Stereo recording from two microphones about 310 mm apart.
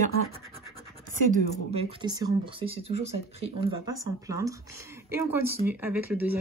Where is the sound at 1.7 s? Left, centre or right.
Centre.